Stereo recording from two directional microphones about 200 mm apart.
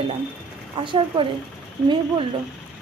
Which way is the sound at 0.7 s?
25° right (ahead or behind).